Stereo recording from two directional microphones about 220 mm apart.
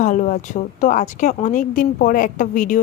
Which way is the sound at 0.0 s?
35° left (ahead or behind).